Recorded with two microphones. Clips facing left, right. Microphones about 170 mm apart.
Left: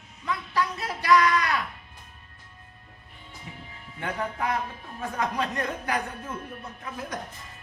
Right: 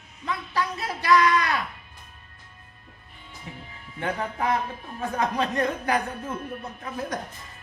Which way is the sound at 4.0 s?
30° right (ahead or behind).